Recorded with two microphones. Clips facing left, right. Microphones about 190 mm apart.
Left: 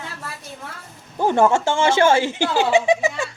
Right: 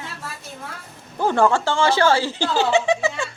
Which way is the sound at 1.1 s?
20° left (ahead or behind).